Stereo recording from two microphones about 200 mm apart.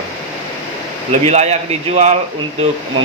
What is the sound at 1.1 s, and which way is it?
Speech, 35° right (ahead or behind).